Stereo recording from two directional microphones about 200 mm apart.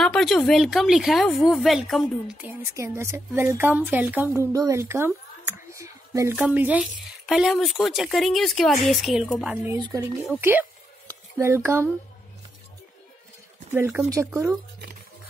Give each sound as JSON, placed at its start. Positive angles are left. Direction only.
{"t": 0.0, "sound": "speech", "side_deg": 0}
{"t": 9.8, "sound": "speech", "side_deg": -20}
{"t": 10.2, "sound": "speech", "side_deg": -10}
{"t": 13.7, "sound": "speech", "side_deg": -15}